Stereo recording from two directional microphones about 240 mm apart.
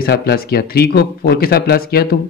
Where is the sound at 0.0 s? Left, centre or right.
Left.